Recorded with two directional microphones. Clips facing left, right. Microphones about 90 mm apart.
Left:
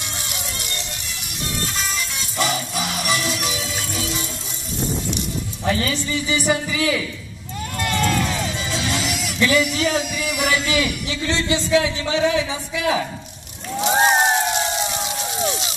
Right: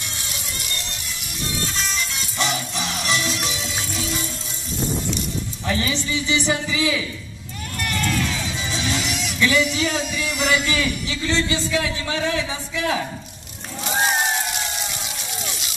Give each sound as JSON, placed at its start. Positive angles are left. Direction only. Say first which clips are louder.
{"t": 2.3, "sound": "music", "louder": "left 3 dB", "side_deg": 5}
{"t": 5.7, "sound": "speech", "louder": "left 2 dB", "side_deg": 0}
{"t": 7.8, "sound": "sheep", "louder": "left 3 dB", "side_deg": 25}
{"t": 8.6, "sound": "a sound", "louder": "right 2 dB", "side_deg": 5}
{"t": 11.2, "sound": "a man's voice", "louder": "left 1 dB", "side_deg": 20}
{"t": 13.8, "sound": "crowd", "louder": "left 5 dB", "side_deg": 35}